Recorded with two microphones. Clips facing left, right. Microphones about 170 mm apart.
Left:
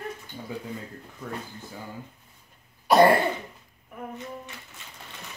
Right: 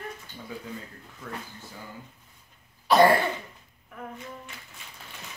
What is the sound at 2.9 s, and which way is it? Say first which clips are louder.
Cough: left 1 dB; 35° left (ahead or behind).